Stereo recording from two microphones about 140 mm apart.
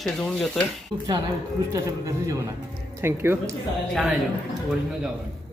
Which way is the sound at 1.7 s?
25° right (ahead or behind).